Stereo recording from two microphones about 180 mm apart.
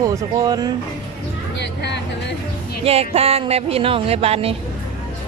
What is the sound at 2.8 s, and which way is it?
Speech, 35° right (ahead or behind).